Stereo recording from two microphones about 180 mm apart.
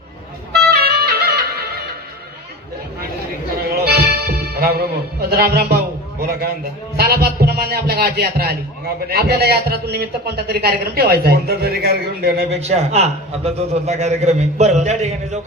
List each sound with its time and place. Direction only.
0.5 s music: 60° right (ahead or behind)
3.7 s music: 60° right (ahead or behind)
6.9 s a man's voice: 60° right (ahead or behind)
12.5 s a man's voice: 35° right (ahead or behind)